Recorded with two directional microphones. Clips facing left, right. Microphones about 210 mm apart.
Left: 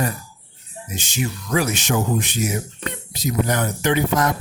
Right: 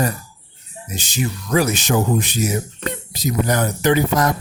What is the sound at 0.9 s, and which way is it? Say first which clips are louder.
Speech: right 2 dB; 35° right (ahead or behind).